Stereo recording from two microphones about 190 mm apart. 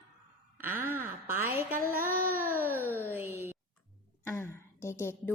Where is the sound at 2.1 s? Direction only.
50° right (ahead or behind).